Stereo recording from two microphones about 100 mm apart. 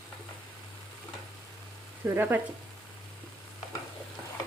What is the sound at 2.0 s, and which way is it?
Speech, 25° right (ahead or behind).